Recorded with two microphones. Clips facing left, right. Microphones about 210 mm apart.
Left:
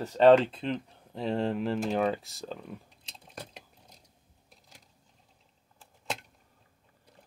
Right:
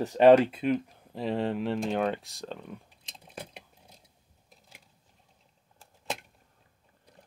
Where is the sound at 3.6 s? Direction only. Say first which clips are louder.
Right 1 dB; centre (ahead or behind).